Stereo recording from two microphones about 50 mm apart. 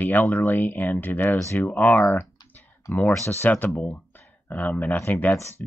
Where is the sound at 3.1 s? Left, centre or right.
Left.